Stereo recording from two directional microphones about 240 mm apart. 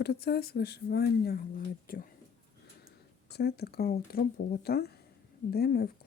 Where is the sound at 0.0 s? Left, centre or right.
Left.